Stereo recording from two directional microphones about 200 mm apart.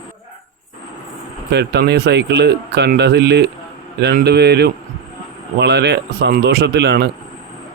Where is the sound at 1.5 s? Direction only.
55° right (ahead or behind).